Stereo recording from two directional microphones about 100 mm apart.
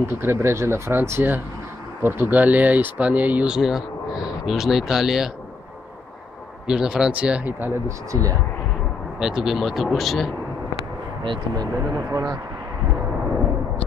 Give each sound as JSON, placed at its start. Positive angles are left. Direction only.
{"t": 0.2, "sound": "speech", "side_deg": -25}
{"t": 6.7, "sound": "speech", "side_deg": -10}
{"t": 8.1, "sound": "speech", "side_deg": -35}
{"t": 9.2, "sound": "speech", "side_deg": -5}
{"t": 11.2, "sound": "speech", "side_deg": -45}